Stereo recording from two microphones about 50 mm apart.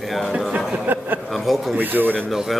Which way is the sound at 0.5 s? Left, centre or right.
Right.